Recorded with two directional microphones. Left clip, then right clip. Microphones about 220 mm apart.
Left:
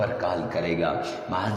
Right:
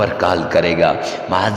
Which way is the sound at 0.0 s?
40° right (ahead or behind).